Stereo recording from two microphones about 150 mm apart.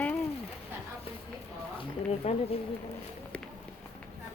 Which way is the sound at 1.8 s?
45° left (ahead or behind).